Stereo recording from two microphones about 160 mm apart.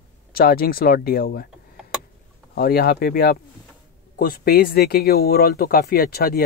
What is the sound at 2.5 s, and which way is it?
Speech, 70° left (ahead or behind).